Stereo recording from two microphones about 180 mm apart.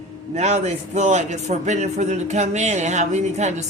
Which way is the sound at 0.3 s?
40° right (ahead or behind).